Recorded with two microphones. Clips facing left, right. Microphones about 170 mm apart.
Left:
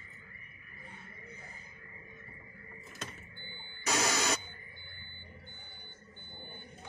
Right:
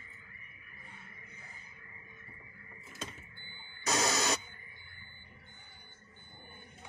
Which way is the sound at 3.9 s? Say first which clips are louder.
Even; 25° right (ahead or behind).